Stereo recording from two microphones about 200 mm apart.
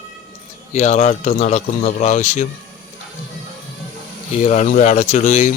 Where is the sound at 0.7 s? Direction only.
35° left (ahead or behind).